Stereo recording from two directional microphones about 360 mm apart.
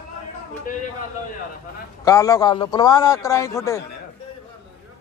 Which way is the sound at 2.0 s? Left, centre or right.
Centre.